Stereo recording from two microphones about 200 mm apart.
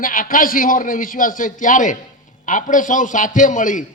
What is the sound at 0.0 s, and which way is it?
A man's voice, 45° left (ahead or behind).